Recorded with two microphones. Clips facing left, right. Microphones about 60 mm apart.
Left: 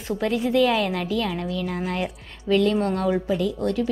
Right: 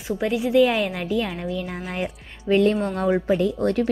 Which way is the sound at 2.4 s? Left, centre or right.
Right.